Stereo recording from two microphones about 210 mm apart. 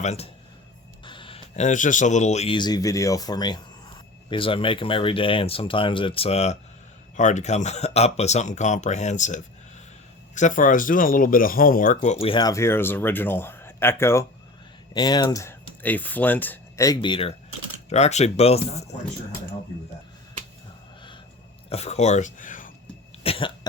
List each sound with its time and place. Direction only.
0.0 s speech: 30° left (ahead or behind)
21.7 s speech: 30° left (ahead or behind)
23.2 s cough: 25° left (ahead or behind)